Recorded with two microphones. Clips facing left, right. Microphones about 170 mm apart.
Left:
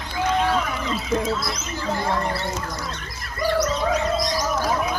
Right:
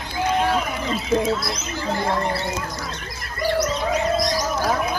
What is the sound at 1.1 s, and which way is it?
Speech, 35° right (ahead or behind).